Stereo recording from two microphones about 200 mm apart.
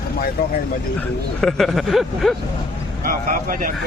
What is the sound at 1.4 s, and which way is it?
Speech, centre (ahead or behind).